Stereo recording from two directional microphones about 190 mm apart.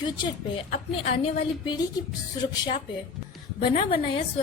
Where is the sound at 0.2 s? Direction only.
30° left (ahead or behind).